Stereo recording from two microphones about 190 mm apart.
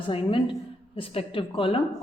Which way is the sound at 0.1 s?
30° left (ahead or behind).